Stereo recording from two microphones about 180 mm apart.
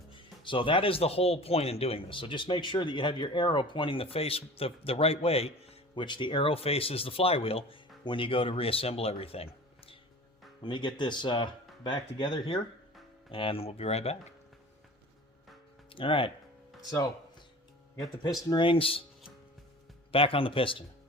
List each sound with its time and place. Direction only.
0.2 s speech: 30° left (ahead or behind)
15.9 s speech: 30° left (ahead or behind)
18.2 s speech: 20° left (ahead or behind)
20.1 s speech: 30° left (ahead or behind)